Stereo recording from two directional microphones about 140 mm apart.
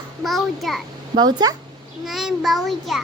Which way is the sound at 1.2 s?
30° right (ahead or behind).